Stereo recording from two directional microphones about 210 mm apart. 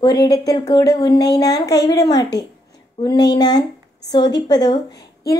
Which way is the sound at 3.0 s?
20° left (ahead or behind).